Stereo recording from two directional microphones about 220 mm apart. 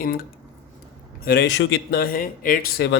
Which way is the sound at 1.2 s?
45° left (ahead or behind).